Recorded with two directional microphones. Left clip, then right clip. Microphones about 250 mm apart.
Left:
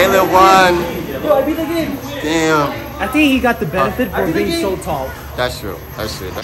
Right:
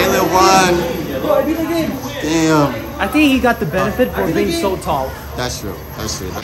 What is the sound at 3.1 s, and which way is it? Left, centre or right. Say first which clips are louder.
A woman's voice: even; centre.